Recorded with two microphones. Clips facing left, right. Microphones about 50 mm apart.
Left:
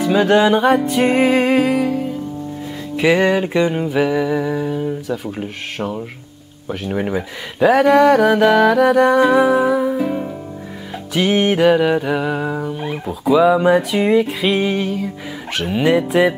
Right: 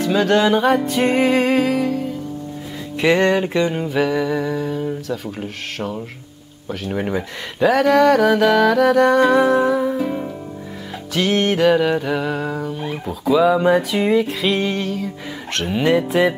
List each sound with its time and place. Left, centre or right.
0.0 s music: centre